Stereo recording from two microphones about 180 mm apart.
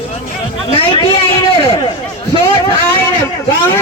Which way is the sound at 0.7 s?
30° left (ahead or behind).